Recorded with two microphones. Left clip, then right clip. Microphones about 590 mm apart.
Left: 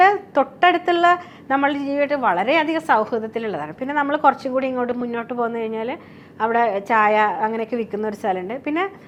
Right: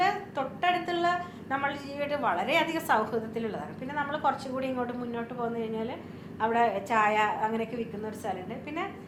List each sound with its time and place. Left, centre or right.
0.0 s a woman's voice: left